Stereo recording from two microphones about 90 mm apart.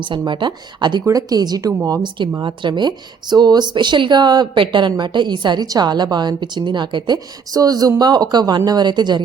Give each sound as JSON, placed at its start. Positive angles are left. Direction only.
{"t": 0.0, "sound": "speech", "side_deg": -60}
{"t": 1.0, "sound": "speech", "side_deg": -45}
{"t": 2.4, "sound": "speech", "side_deg": -60}
{"t": 7.5, "sound": "speech", "side_deg": -45}